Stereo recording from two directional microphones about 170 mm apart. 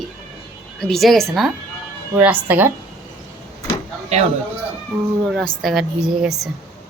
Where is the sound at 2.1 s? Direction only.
10° right (ahead or behind).